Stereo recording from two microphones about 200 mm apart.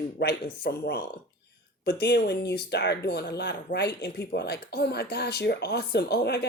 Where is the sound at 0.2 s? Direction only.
55° left (ahead or behind).